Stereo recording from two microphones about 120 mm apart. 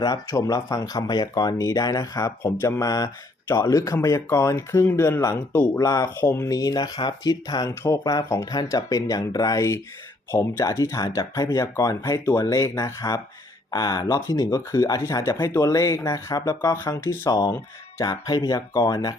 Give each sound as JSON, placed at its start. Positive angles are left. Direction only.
{"t": 0.0, "sound": "speech", "side_deg": 30}
{"t": 5.5, "sound": "speech", "side_deg": 15}
{"t": 5.7, "sound": "speech", "side_deg": 25}